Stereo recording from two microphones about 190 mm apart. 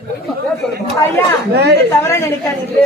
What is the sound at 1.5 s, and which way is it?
Speech, 60° right (ahead or behind).